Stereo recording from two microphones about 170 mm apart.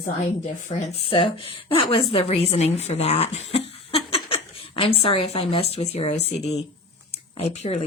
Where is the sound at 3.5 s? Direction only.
35° left (ahead or behind).